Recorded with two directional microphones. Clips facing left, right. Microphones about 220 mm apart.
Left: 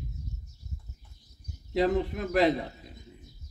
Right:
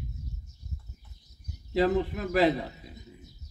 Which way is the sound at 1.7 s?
5° right (ahead or behind).